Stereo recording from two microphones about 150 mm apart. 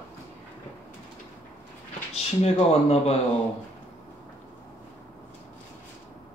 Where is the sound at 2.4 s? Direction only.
45° left (ahead or behind).